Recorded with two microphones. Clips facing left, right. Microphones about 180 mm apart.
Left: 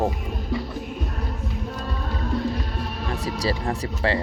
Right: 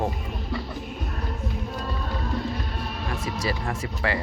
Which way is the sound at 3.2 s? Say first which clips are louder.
Left 4 dB; 35° left (ahead or behind).